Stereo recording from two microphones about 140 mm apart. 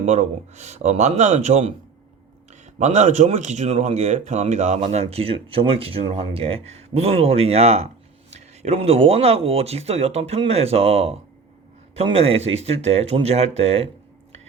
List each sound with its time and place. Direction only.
0.0 s speech: 55° right (ahead or behind)